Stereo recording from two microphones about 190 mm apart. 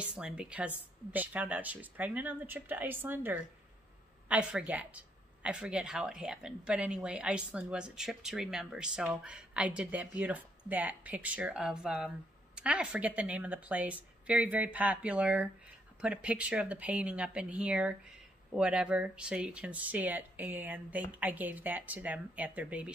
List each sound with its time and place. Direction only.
0.0 s speech: 5° right (ahead or behind)